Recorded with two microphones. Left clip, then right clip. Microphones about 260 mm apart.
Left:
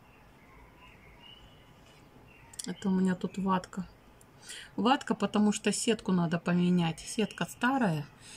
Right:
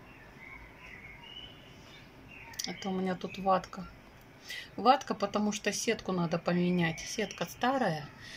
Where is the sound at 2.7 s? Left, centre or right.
Centre.